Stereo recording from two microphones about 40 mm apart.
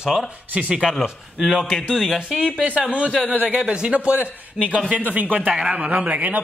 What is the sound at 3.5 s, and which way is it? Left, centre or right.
A man's voice, right.